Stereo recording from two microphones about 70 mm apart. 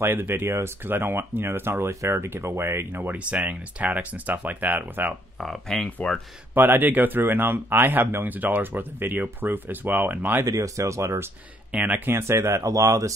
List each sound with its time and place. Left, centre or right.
0.0 s speech: right
3.2 s speech: centre
5.4 s speech: centre
5.9 s speech: left
6.5 s speech: right
10.4 s speech: right
11.7 s speech: right
12.2 s speech: right